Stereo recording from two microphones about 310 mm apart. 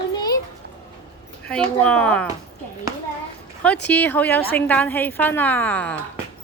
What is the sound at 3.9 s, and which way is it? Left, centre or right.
A woman's voice, centre.